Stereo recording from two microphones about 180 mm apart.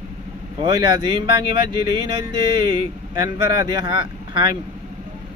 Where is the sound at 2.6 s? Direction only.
20° right (ahead or behind).